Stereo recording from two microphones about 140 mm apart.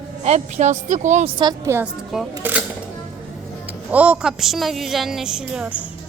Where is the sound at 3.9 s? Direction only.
10° right (ahead or behind).